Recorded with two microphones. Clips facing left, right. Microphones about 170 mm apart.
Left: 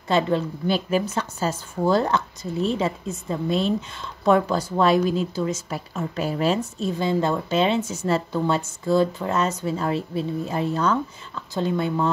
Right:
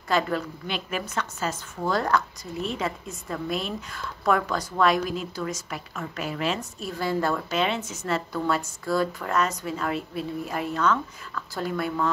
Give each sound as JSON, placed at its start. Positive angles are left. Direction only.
{"t": 0.1, "sound": "a woman's voice", "side_deg": 30}